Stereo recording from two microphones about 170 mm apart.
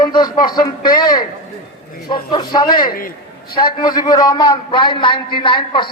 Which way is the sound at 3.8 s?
25° left (ahead or behind).